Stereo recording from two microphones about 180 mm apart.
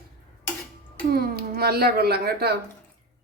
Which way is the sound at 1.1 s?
55° right (ahead or behind).